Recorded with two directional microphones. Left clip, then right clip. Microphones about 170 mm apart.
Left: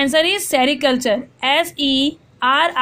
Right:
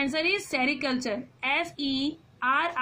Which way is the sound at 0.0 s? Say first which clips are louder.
Left 11 dB; 35° left (ahead or behind).